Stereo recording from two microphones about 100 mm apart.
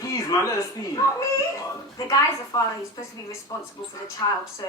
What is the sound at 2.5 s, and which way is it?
Speech, 40° left (ahead or behind).